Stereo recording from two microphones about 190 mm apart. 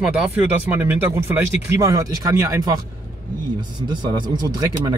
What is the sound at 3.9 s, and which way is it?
Speech, 25° right (ahead or behind).